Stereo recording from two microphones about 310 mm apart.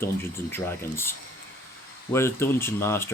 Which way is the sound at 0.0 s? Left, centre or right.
Centre.